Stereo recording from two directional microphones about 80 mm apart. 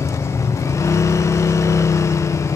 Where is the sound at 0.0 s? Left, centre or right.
Left.